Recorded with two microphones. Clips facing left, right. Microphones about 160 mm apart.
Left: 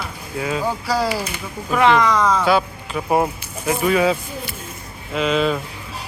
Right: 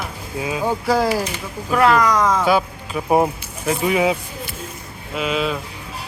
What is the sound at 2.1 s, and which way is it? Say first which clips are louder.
Speech: even; 20° right (ahead or behind).